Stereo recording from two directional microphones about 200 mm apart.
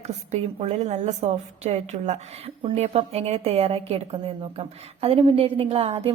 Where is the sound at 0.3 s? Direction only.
35° right (ahead or behind).